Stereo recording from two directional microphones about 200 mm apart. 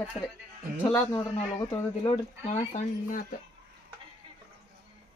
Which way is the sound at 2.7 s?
40° left (ahead or behind).